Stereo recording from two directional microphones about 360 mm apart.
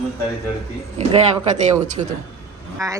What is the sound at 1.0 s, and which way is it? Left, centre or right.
Speech, centre.